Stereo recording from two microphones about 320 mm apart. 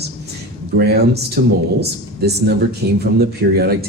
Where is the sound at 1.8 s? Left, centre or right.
Right.